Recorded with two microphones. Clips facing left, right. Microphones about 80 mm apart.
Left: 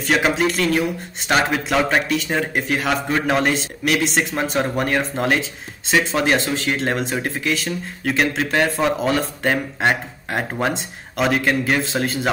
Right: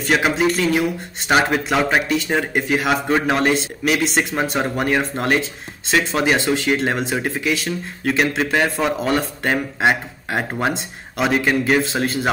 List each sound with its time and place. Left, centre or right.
0.0 s a man's voice: centre